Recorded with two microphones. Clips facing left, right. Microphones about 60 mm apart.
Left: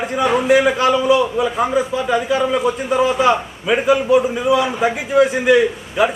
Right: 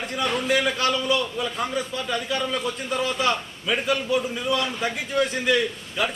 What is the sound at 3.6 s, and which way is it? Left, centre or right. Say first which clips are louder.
A man's voice: left 9 dB; left.